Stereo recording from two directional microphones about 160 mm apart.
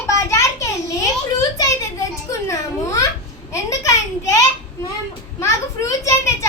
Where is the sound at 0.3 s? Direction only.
20° left (ahead or behind).